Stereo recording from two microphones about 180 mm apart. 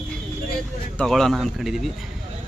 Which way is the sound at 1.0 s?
Centre (ahead or behind).